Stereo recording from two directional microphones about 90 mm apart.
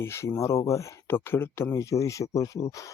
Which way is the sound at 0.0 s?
30° left (ahead or behind).